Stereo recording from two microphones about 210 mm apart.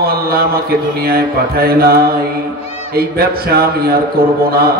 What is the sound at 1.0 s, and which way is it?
Speech, 45° right (ahead or behind).